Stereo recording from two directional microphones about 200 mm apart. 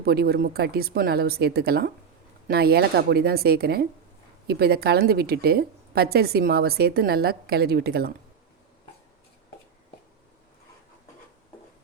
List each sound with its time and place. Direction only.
0.0 s a woman's voice: 50° right (ahead or behind)